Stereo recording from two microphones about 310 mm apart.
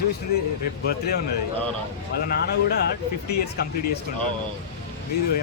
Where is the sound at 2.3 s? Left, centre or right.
Left.